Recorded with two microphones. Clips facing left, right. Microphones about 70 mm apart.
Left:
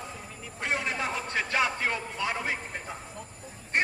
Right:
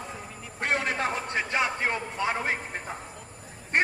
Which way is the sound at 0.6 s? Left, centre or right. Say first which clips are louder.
Right 3 dB; right.